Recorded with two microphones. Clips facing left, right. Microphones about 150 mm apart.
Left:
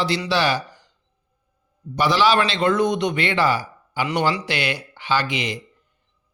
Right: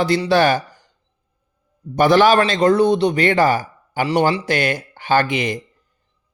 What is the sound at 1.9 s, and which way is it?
A man's voice, 50° right (ahead or behind).